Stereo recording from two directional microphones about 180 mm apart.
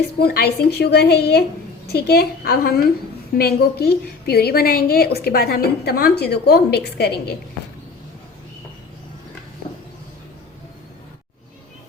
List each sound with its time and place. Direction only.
0.2 s a woman's voice: 60° left (ahead or behind)